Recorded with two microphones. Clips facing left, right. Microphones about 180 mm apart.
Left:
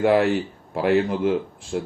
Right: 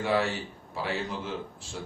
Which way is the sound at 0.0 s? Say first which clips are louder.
Left 9 dB; 60° left (ahead or behind).